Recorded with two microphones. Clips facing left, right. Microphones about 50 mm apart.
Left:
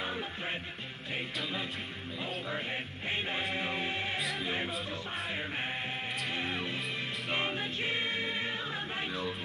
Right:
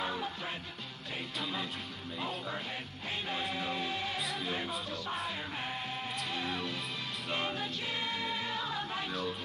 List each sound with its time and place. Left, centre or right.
0.0 s music: centre
1.4 s music: centre
3.1 s music: left
6.3 s music: left